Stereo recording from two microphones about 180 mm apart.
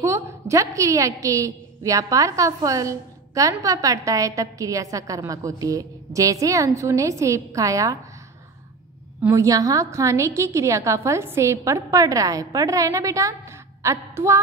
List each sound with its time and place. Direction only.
0.0 s a woman's voice: 15° right (ahead or behind)
9.2 s a woman's voice: 15° right (ahead or behind)